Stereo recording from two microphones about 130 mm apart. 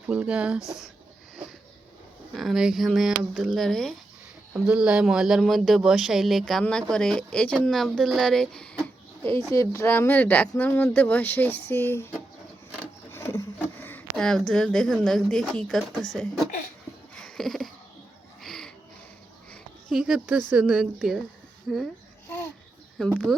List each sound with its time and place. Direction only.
0.1 s speech: 10° right (ahead or behind)
2.3 s speech: centre (ahead or behind)
9.5 s speech: 20° left (ahead or behind)
12.7 s a sound: 15° left (ahead or behind)
14.2 s speech: 5° left (ahead or behind)
17.2 s a sound: 5° left (ahead or behind)
19.9 s speech: 5° right (ahead or behind)
23.0 s speech: 5° left (ahead or behind)